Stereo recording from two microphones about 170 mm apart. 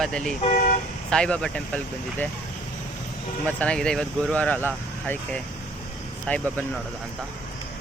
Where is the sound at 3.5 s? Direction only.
5° left (ahead or behind).